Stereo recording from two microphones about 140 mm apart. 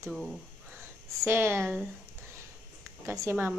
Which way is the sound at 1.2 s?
15° right (ahead or behind).